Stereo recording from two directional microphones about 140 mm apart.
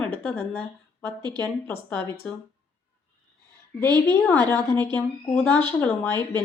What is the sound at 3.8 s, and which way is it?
Speech, 30° right (ahead or behind).